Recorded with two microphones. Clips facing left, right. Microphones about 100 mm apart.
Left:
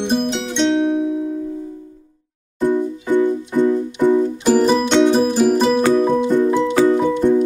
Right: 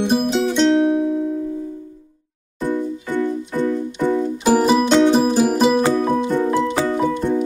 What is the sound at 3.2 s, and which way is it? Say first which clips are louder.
Music: left 4 dB; 15° left (ahead or behind).